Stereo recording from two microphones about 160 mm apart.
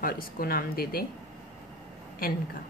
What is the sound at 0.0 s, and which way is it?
A woman's voice, 65° left (ahead or behind).